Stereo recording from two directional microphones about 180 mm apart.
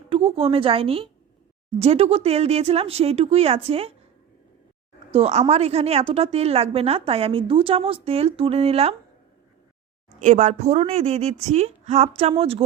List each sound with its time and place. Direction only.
0.1 s a woman's voice: 30° right (ahead or behind)
5.1 s a woman's voice: 35° right (ahead or behind)
10.2 s a woman's voice: 40° right (ahead or behind)